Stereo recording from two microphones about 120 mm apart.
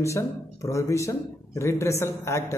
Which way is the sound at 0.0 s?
25° left (ahead or behind).